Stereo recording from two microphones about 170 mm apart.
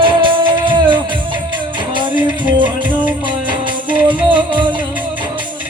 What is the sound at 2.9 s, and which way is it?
Music, 10° right (ahead or behind).